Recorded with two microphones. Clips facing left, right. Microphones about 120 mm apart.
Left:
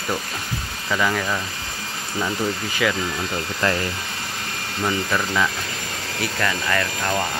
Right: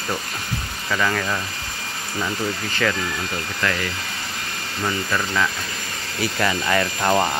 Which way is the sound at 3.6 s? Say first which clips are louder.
Left 2 dB; 25° left (ahead or behind).